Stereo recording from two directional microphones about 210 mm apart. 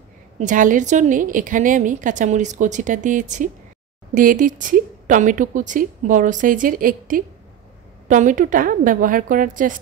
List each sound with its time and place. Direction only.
0.4 s speech: 40° right (ahead or behind)